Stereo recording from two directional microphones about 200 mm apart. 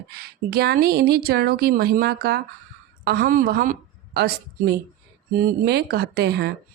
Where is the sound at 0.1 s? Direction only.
50° right (ahead or behind).